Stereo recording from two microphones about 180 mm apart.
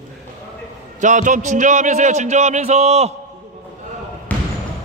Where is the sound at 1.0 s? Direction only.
45° right (ahead or behind).